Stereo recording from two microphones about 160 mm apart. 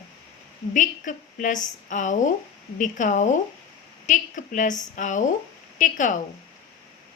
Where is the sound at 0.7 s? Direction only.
55° left (ahead or behind).